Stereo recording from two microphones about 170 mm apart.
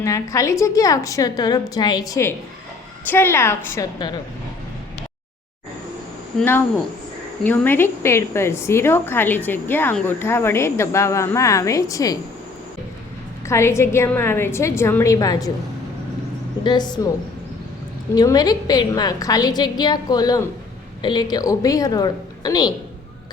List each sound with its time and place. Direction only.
0.0 s a woman's voice: 20° left (ahead or behind)
7.4 s a woman's voice: 10° left (ahead or behind)
13.5 s a woman's voice: 15° left (ahead or behind)
16.6 s a woman's voice: 25° left (ahead or behind)
18.1 s a woman's voice: 25° left (ahead or behind)